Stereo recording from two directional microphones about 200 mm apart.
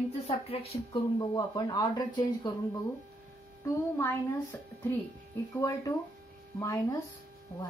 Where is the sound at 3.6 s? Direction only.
10° left (ahead or behind).